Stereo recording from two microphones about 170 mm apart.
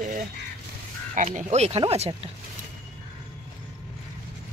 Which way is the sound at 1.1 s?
45° right (ahead or behind).